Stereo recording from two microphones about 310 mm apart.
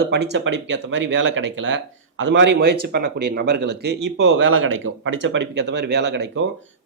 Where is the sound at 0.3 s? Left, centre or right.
Right.